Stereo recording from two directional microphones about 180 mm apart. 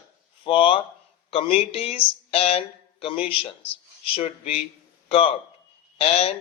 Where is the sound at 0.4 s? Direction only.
30° left (ahead or behind).